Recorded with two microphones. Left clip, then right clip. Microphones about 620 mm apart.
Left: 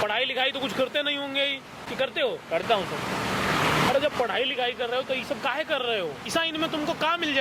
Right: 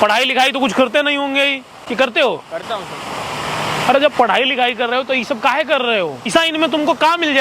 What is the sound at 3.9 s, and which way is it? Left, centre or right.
Speech, right.